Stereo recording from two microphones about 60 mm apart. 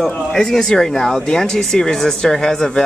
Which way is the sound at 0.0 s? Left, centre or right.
Centre.